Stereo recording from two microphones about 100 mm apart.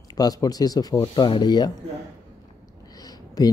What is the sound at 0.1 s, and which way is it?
Speech, 35° left (ahead or behind).